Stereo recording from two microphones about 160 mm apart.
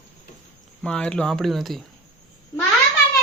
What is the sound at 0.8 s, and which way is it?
A man's voice, 5° left (ahead or behind).